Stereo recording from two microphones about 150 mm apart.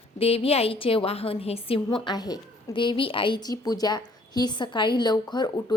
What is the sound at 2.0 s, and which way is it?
A woman's voice, 25° left (ahead or behind).